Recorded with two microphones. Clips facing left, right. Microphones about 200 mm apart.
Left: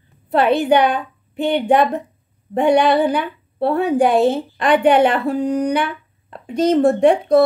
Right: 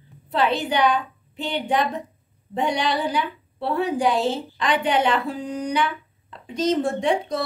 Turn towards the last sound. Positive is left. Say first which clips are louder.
# left 10 dB
turn(degrees=60)  # may be behind; listen again after turning